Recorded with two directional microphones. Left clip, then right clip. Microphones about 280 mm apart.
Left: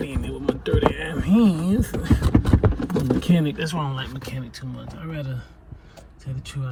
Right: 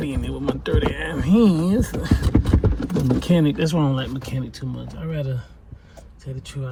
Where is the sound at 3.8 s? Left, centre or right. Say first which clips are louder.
Right 6 dB; centre.